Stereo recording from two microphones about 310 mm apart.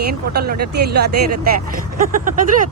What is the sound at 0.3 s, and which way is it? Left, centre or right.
Speech, right.